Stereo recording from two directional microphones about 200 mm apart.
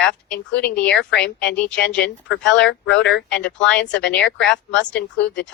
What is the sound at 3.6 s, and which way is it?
Speech, 5° left (ahead or behind).